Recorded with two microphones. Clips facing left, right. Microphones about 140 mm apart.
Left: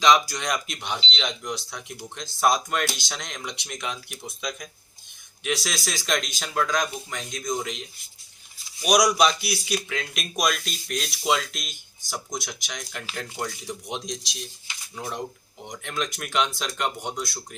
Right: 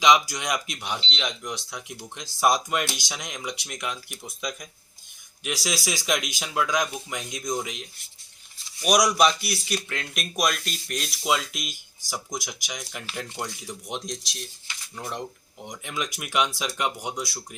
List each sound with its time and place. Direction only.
0.0 s speech: 15° right (ahead or behind)